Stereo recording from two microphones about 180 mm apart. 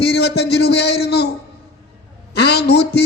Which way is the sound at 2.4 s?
65° left (ahead or behind).